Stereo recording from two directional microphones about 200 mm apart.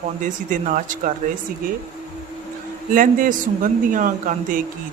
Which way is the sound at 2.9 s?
40° right (ahead or behind).